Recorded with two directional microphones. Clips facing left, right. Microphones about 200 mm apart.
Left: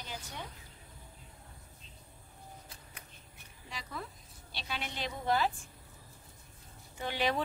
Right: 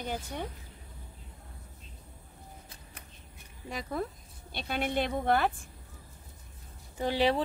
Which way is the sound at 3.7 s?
50° right (ahead or behind).